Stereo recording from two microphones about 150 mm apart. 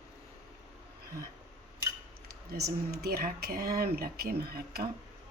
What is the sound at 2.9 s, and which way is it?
Speech, 90° right.